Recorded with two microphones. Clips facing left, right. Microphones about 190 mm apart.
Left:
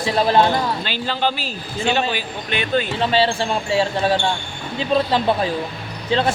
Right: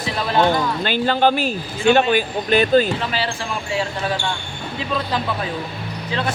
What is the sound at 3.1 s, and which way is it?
Speech, 30° left (ahead or behind).